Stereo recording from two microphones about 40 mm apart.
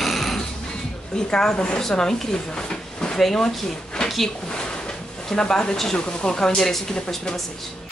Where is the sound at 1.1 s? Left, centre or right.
Centre.